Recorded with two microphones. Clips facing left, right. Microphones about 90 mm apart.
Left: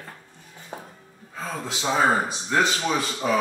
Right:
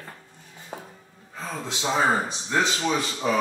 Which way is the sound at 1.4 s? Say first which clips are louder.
Left 1 dB; centre (ahead or behind).